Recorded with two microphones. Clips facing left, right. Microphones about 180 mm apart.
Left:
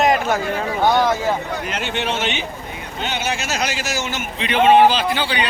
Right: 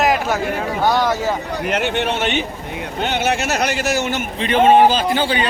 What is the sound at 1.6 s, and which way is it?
A man's voice, 60° right (ahead or behind).